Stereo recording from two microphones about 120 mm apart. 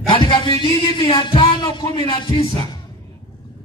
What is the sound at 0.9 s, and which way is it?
Music, 45° left (ahead or behind).